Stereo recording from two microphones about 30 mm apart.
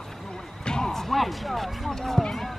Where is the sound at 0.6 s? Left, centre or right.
Left.